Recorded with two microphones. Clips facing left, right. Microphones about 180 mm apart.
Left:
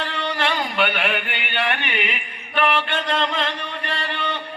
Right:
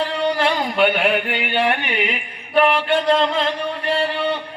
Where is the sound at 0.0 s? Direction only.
35° right (ahead or behind).